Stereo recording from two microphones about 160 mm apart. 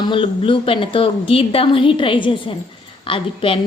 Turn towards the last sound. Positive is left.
turn(degrees=35)  # may be behind; listen again after turning